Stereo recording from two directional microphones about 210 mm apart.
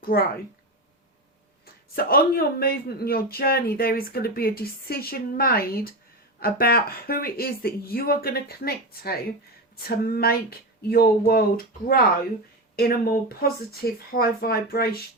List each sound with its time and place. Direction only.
0.0 s speech: 45° left (ahead or behind)
1.6 s speech: 45° left (ahead or behind)